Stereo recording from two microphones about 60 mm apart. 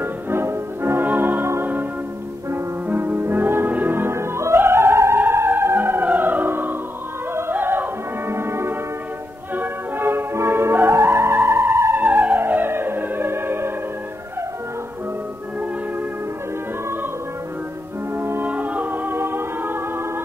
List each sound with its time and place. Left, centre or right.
0.0 s music: right
12.0 s music: right
18.1 s music: right
18.4 s music: right